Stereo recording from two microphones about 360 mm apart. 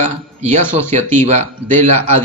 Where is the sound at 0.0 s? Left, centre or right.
Centre.